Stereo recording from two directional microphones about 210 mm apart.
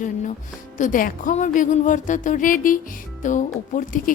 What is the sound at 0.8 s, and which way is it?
Speech, 40° left (ahead or behind).